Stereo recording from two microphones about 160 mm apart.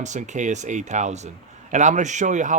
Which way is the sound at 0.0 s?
50° right (ahead or behind).